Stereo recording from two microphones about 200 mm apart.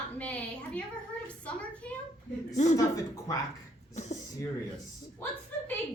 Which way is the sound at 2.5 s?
35° left (ahead or behind).